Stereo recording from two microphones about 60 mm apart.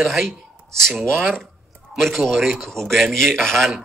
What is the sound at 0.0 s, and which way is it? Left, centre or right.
A man's voice, centre.